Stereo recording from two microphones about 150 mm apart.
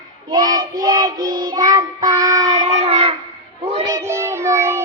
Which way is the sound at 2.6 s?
40° right (ahead or behind).